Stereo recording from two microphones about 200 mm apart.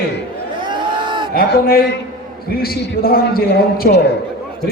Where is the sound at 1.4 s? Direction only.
50° left (ahead or behind).